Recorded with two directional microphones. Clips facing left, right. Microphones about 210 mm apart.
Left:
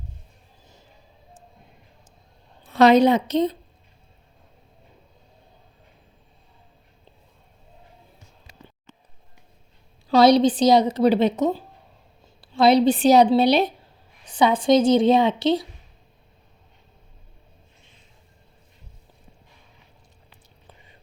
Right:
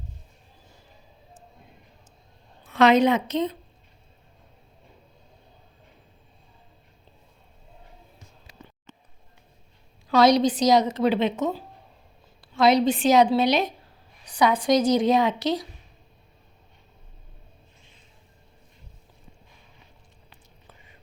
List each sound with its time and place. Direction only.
2.6 s a woman's voice: 35° left (ahead or behind)
10.1 s a woman's voice: 30° left (ahead or behind)
12.5 s a woman's voice: 30° left (ahead or behind)